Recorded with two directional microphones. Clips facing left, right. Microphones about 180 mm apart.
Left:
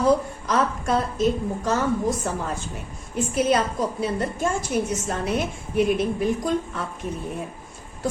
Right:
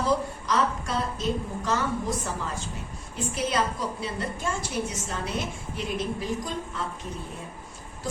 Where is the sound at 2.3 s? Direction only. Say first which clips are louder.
Left 5 dB; 55° left (ahead or behind).